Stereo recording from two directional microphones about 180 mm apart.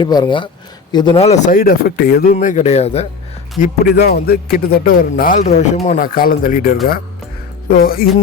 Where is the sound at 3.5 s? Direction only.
55° left (ahead or behind).